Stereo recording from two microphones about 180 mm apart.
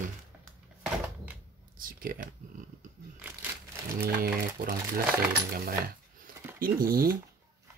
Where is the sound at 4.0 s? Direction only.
55° right (ahead or behind).